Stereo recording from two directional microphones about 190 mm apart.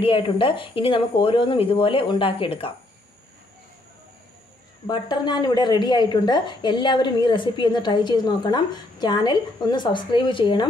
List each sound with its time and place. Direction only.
0.0 s a woman's voice: 25° left (ahead or behind)
4.8 s a woman's voice: 20° left (ahead or behind)